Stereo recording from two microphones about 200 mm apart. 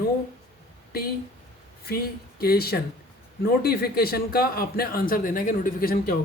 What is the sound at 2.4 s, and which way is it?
A man's voice, 50° left (ahead or behind).